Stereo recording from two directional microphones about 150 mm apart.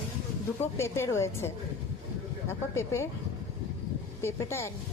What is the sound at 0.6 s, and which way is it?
A woman's voice, 20° left (ahead or behind).